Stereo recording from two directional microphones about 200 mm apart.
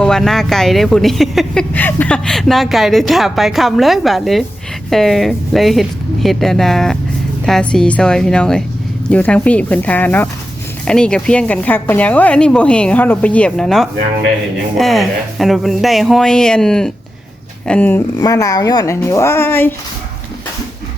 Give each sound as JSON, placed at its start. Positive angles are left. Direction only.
{"t": 0.0, "sound": "speech", "side_deg": 0}